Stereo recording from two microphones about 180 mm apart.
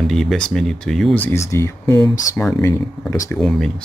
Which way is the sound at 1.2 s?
15° left (ahead or behind).